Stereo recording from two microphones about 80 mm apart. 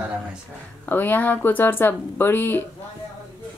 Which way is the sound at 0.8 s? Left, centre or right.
Left.